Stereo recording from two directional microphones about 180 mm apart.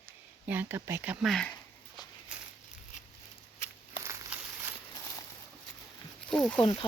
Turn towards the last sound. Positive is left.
turn(degrees=25)  # may be behind; listen again after turning